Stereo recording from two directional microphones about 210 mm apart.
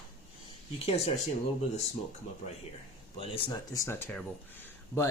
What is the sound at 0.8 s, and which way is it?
Speech, 30° left (ahead or behind).